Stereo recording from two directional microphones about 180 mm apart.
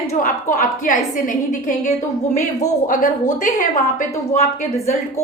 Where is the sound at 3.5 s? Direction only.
45° left (ahead or behind).